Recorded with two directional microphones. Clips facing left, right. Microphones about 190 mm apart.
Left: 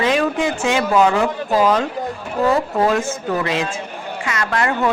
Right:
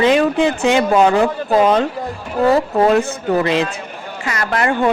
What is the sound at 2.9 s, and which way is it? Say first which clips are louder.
A woman's voice: right 4 dB; 35° right (ahead or behind).